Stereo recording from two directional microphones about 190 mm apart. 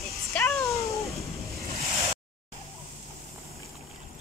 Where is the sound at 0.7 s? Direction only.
15° left (ahead or behind).